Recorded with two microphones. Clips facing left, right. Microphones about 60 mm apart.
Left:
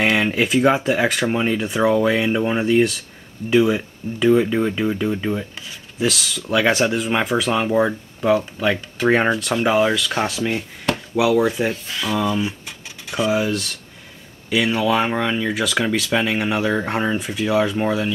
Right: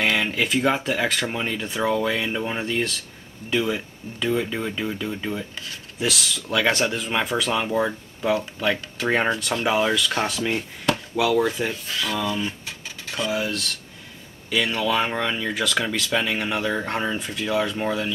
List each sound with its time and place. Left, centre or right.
0.0 s speech: centre
1.2 s speech: left
1.6 s speech: centre
5.9 s speech: centre